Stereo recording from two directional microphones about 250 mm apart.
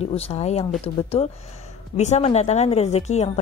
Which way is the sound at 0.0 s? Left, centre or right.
Left.